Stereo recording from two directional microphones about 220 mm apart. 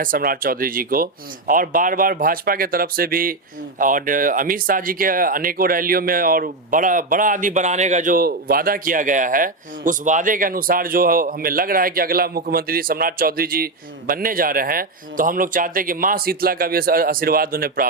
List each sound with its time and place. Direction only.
0.0 s speech: 40° right (ahead or behind)